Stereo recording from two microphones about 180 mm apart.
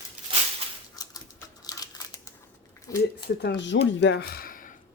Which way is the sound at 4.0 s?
70° left (ahead or behind).